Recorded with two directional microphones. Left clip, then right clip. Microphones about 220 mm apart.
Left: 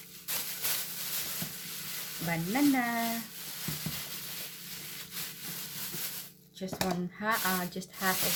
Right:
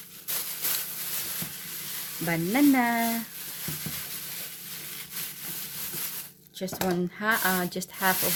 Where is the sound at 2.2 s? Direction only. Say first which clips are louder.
Right 6 dB; 50° right (ahead or behind).